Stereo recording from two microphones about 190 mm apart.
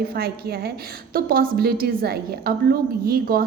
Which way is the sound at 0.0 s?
55° right (ahead or behind).